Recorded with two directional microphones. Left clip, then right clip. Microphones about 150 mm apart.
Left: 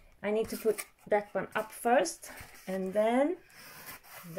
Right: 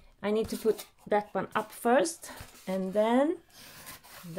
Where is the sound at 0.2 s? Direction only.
15° right (ahead or behind).